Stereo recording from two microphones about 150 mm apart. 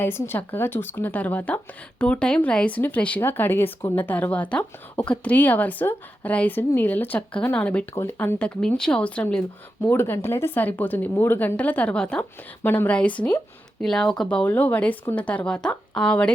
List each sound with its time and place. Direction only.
0.0 s speech: 15° left (ahead or behind)